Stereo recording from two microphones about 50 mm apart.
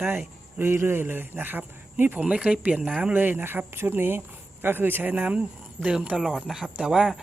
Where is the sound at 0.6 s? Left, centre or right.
Right.